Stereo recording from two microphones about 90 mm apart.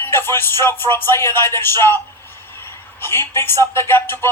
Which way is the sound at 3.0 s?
25° left (ahead or behind).